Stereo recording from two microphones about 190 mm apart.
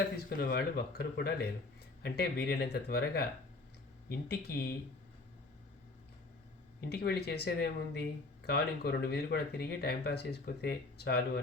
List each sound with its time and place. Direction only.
0.3 s speech: 45° left (ahead or behind)
6.9 s speech: 60° left (ahead or behind)